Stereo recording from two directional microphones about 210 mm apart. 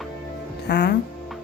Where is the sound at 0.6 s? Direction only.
50° left (ahead or behind).